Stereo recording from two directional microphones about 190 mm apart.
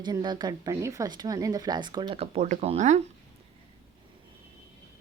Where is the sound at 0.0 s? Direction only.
25° right (ahead or behind).